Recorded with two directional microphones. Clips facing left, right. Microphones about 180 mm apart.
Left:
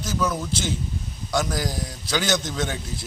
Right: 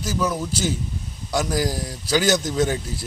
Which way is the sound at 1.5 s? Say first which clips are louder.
Right 4 dB; 10° right (ahead or behind).